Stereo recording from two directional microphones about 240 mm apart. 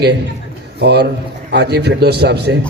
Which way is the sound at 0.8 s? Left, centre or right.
Right.